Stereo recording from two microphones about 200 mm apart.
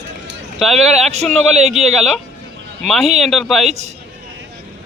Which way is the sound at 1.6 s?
35° right (ahead or behind).